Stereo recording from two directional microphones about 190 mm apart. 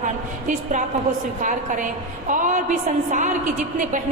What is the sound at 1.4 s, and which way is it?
A woman's voice, 40° right (ahead or behind).